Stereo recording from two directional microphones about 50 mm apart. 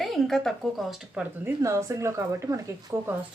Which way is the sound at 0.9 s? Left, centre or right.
Centre.